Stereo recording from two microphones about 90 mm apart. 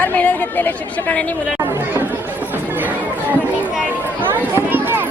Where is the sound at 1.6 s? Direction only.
25° right (ahead or behind).